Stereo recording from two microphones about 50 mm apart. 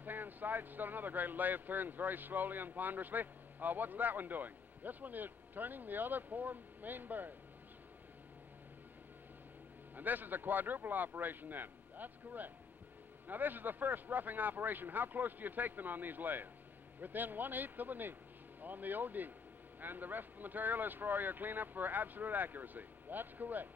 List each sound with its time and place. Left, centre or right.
0.0 s speech: right
9.9 s speech: right